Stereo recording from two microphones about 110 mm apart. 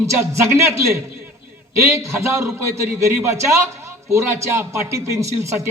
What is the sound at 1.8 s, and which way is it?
Speech, 25° right (ahead or behind).